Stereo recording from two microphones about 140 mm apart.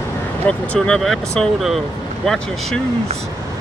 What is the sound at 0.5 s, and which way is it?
Speech, 5° left (ahead or behind).